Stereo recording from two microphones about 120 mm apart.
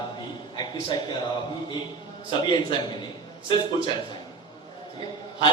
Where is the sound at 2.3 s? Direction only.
40° left (ahead or behind).